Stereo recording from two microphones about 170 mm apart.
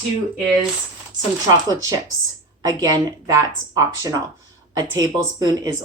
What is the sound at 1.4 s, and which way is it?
Speech, 20° right (ahead or behind).